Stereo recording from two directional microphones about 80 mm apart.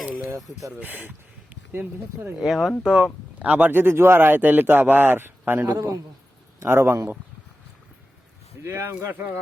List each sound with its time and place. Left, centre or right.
0.0 s a sound: centre
0.8 s speech: right
2.4 s speech: centre; by 7.2 s right
8.6 s speech: right